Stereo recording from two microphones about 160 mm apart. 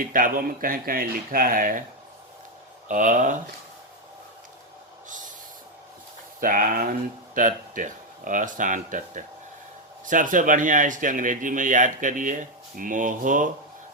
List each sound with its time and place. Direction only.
0.0 s speech: 60° right (ahead or behind)
2.9 s speech: 50° right (ahead or behind)
6.4 s speech: 60° right (ahead or behind)